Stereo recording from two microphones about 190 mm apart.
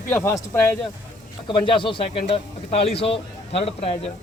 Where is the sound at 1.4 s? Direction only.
25° left (ahead or behind).